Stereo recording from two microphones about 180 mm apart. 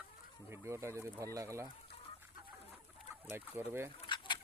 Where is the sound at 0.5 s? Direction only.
15° right (ahead or behind).